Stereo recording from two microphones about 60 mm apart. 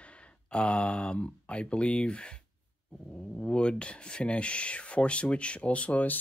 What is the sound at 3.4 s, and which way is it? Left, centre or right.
Speech, centre.